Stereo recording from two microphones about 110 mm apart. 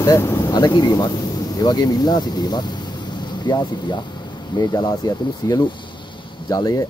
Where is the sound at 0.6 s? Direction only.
40° left (ahead or behind).